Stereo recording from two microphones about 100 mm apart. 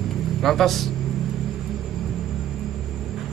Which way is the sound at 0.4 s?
Centre (ahead or behind).